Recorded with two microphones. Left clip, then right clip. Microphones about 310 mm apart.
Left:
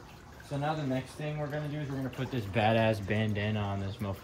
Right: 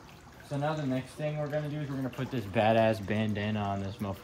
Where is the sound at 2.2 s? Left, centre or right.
Centre.